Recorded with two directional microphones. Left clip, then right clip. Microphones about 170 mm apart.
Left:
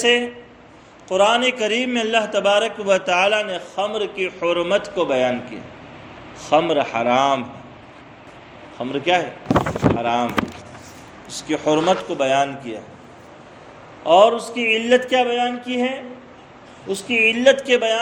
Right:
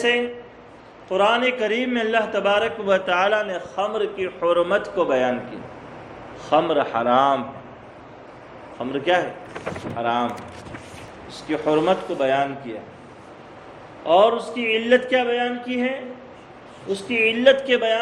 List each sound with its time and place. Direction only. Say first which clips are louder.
1.0 s a man's voice: left 2 dB; 45° left (ahead or behind)
6.5 s a man's voice: left 2 dB; 45° left (ahead or behind)
8.8 s a man's voice: left 1 dB; 45° left (ahead or behind)
14.0 s a man's voice: left 3 dB; 45° left (ahead or behind)